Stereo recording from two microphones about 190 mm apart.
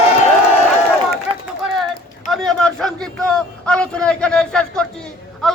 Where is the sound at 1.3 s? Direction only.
30° right (ahead or behind).